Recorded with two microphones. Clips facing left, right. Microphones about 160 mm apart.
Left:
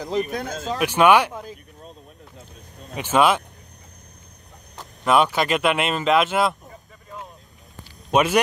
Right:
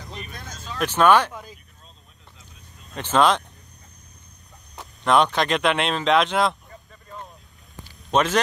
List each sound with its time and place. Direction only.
0.3 s speech: 65° left (ahead or behind)
0.7 s speech: 10° left (ahead or behind)
3.0 s speech: 10° left (ahead or behind)
4.7 s speech: 5° left (ahead or behind)
8.1 s speech: 10° left (ahead or behind)